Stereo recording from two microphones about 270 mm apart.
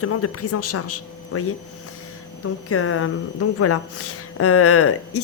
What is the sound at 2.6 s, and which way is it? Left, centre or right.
Speech, left.